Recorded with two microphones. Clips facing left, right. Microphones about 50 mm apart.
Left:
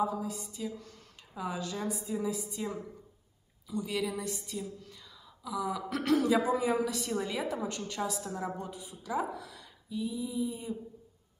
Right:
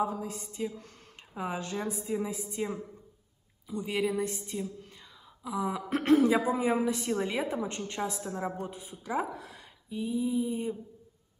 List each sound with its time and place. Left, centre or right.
0.0 s a woman's voice: right